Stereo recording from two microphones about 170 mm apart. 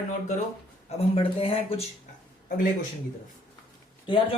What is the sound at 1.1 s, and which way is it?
Speech, 35° left (ahead or behind).